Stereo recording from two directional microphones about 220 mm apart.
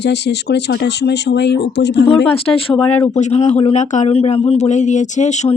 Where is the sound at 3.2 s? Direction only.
30° left (ahead or behind).